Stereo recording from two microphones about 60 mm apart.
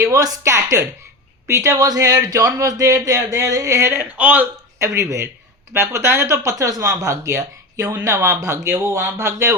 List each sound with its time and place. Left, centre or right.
0.0 s speech: right
0.5 s speech: right
1.8 s speech: right
4.2 s speech: right
4.8 s speech: right
5.7 s speech: right
7.1 s speech: right
8.0 s speech: right